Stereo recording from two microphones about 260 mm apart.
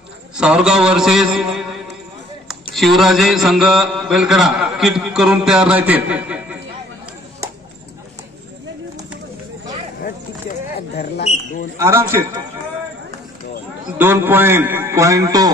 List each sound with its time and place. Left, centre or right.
0.4 s music: centre
2.7 s a man's voice: centre
10.0 s a sound: left
11.8 s a man's voice: centre
13.9 s a man's voice: centre